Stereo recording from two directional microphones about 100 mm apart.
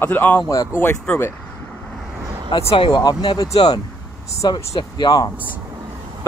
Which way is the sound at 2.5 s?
50° left (ahead or behind).